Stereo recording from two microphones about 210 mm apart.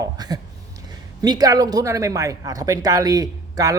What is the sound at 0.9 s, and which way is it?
A man's voice, 20° right (ahead or behind).